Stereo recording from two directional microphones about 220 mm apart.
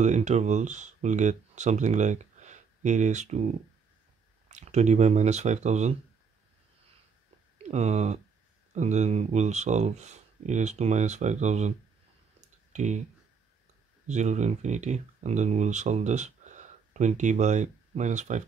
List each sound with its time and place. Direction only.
0.0 s speech: 30° right (ahead or behind)
4.5 s speech: 30° right (ahead or behind)
7.5 s speech: 30° right (ahead or behind)
12.4 s clicking: 35° right (ahead or behind)
14.0 s speech: 30° right (ahead or behind)